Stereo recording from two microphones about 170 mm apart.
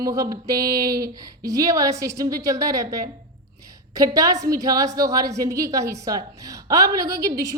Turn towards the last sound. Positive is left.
turn(degrees=-20)  # may be behind; listen again after turning